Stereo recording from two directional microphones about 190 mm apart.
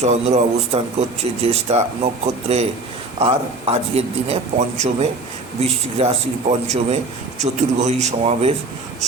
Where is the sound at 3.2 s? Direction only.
30° right (ahead or behind).